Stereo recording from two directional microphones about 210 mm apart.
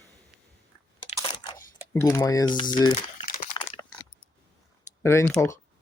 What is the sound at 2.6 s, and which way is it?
Crumpling, 20° left (ahead or behind).